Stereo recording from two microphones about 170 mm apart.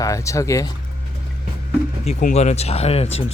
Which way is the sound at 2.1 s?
45° left (ahead or behind).